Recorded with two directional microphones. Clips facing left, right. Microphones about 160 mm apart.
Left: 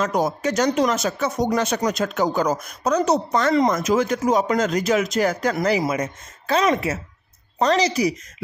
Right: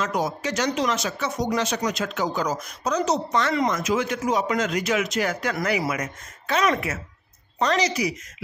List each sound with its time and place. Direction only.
0.0 s speech: 45° left (ahead or behind)
3.3 s speech: 40° left (ahead or behind)